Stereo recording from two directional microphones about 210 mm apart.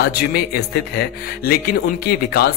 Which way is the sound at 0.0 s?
45° left (ahead or behind).